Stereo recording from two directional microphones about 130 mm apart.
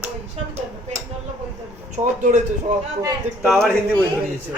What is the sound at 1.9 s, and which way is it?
Speech, 70° right (ahead or behind).